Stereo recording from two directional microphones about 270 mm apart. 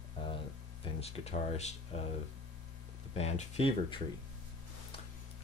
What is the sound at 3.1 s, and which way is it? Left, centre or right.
Speech, left.